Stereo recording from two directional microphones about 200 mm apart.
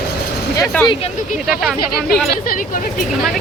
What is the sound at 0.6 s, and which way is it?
Speech, 20° left (ahead or behind).